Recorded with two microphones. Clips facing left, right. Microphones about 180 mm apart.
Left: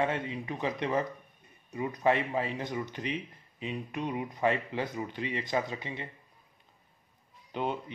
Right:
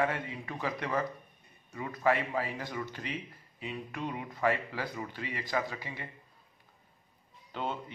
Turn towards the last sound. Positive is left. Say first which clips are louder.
# left 3 dB
turn(degrees=15)  # may be behind; listen again after turning